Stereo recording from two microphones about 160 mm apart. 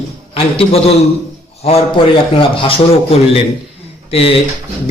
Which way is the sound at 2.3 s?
35° left (ahead or behind).